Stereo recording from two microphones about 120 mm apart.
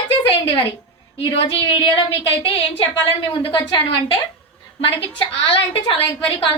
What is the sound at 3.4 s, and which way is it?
Speech, 45° left (ahead or behind).